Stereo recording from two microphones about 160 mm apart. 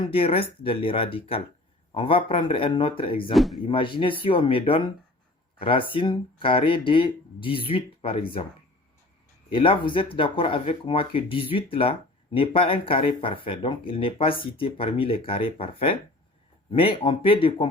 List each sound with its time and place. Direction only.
0.0 s speech: 35° left (ahead or behind)
3.3 s speech: centre (ahead or behind)
3.7 s speech: 30° left (ahead or behind)
9.5 s speech: 35° left (ahead or behind)